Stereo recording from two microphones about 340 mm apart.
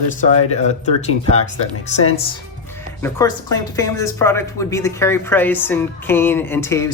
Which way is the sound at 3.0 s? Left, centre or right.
Centre.